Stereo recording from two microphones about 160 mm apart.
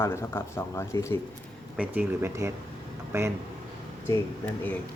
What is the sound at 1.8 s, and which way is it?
Speech, 15° right (ahead or behind).